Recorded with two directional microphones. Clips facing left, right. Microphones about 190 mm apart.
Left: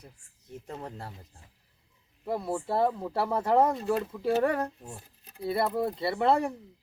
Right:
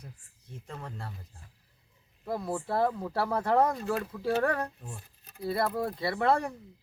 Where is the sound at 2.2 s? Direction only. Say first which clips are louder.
Left 2 dB; 5° left (ahead or behind).